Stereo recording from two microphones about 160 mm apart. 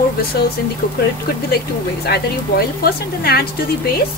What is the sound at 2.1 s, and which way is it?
Speech, 75° left (ahead or behind).